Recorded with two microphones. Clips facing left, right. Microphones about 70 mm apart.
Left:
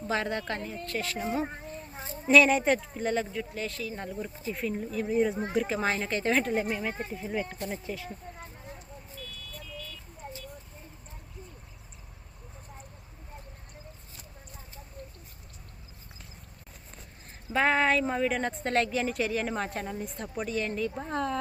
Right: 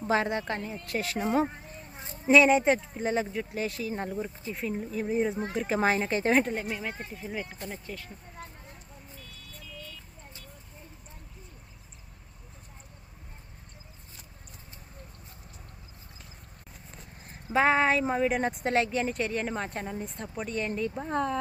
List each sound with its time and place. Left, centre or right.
0.0 s a woman's voice: right
0.3 s speech: centre; by 1.5 s right
2.2 s speech: centre
3.8 s speech: right
4.4 s a woman's voice: centre
4.9 s speech: centre
5.3 s speech: centre
5.6 s speech: right
6.5 s a woman's voice: centre
17.5 s a woman's voice: centre
20.7 s speech: centre